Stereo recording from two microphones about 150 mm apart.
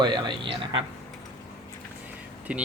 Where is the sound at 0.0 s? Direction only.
30° right (ahead or behind).